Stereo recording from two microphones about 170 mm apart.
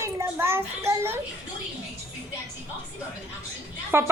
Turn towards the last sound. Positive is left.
turn(degrees=-15)  # may be behind; listen again after turning